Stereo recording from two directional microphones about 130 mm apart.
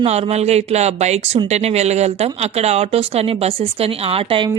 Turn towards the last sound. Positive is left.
turn(degrees=-45)  # may be behind; listen again after turning